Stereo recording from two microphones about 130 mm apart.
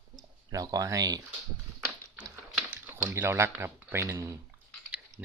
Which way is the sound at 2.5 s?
15° right (ahead or behind).